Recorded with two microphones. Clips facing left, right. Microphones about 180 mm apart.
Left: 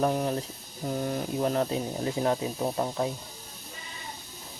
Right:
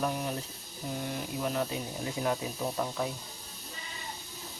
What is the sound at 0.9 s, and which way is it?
Speech, 45° left (ahead or behind).